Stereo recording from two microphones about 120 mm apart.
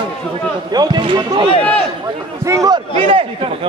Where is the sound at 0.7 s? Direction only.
35° right (ahead or behind).